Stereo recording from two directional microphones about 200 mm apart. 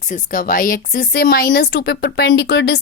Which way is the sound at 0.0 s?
40° left (ahead or behind).